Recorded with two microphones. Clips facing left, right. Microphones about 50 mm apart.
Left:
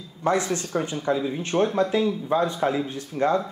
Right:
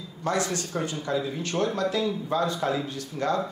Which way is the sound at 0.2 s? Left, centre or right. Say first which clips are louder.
Left 4 dB; left.